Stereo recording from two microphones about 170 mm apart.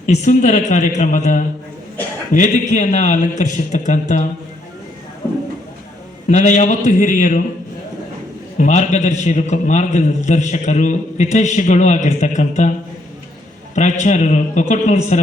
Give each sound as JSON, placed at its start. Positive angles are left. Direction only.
{"t": 0.1, "sound": "a man's voice", "side_deg": 45}
{"t": 6.2, "sound": "a man's voice", "side_deg": 45}
{"t": 8.5, "sound": "a man's voice", "side_deg": 45}
{"t": 14.0, "sound": "a man's voice", "side_deg": 45}